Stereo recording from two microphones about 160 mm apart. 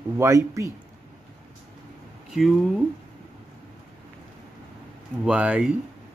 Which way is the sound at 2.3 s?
Centre (ahead or behind).